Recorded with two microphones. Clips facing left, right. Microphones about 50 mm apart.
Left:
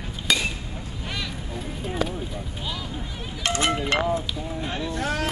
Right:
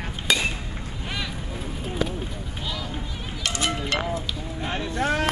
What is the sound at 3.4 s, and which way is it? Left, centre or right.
Speech, left.